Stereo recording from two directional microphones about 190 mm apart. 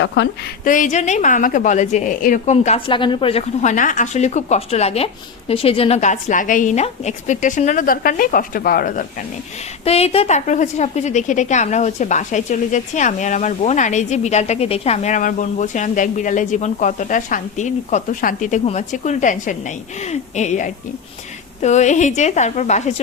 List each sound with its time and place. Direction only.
0.0 s speech: 70° left (ahead or behind)
0.6 s a woman's voice: 45° left (ahead or behind)
9.8 s a woman's voice: 30° left (ahead or behind)